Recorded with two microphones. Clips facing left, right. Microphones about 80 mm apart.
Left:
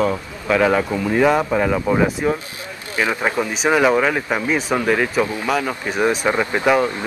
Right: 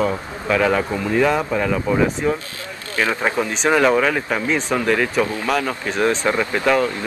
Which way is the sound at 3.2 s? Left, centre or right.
Centre.